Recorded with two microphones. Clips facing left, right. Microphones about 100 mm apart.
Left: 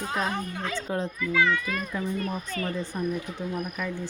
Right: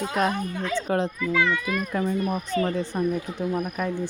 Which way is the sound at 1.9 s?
75° right (ahead or behind).